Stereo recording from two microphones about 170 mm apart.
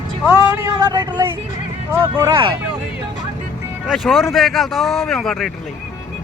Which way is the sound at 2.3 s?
30° right (ahead or behind).